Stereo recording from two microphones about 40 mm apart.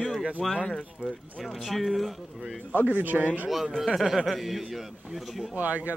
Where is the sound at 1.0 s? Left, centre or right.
Right.